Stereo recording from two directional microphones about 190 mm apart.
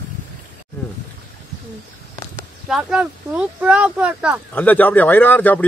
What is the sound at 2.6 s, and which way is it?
Speech, 5° right (ahead or behind).